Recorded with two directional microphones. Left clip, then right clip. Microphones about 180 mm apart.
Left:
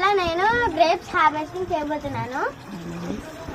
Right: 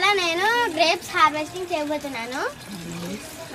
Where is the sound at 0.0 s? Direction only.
20° right (ahead or behind).